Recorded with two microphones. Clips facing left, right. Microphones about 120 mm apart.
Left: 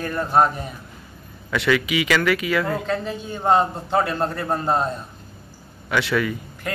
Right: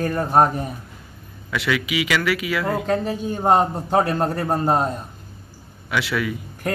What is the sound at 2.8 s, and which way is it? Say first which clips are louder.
A man's voice: right 4 dB; 45° right (ahead or behind).